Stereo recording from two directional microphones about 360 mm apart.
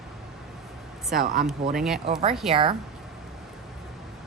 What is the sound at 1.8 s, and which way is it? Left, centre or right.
Speech, centre.